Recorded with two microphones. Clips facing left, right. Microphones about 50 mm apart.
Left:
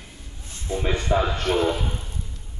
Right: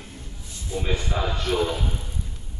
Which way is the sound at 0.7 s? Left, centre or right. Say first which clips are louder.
Left 5 dB; left.